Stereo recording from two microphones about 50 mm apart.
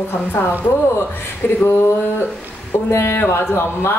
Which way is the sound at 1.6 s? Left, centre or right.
Left.